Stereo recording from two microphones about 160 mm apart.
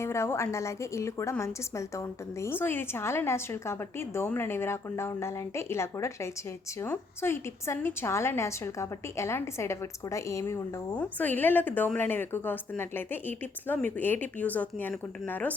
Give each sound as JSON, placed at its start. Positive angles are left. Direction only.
{"t": 0.0, "sound": "a woman's voice", "side_deg": 15}